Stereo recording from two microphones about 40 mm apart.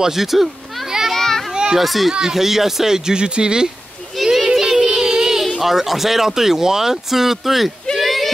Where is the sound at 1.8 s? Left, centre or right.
Centre.